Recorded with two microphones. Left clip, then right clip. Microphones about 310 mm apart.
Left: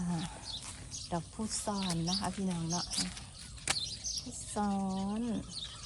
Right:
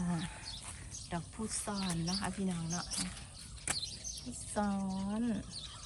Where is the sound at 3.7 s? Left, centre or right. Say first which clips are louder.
Left 4 dB; centre.